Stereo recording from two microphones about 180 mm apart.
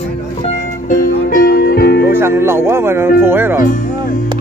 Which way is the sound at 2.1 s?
15° right (ahead or behind).